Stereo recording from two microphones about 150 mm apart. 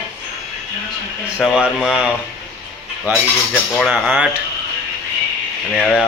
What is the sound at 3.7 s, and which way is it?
Speech, centre (ahead or behind).